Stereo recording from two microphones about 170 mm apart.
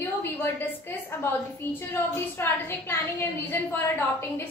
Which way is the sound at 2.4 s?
15° left (ahead or behind).